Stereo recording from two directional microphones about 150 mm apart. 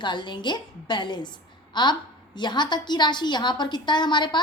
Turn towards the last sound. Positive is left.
turn(degrees=30)  # may be behind; listen again after turning